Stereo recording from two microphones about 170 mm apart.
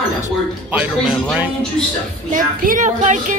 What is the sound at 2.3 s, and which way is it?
Speech, 50° right (ahead or behind).